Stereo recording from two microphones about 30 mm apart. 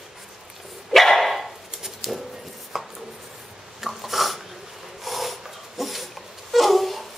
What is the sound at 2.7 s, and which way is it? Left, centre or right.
Chopping, centre.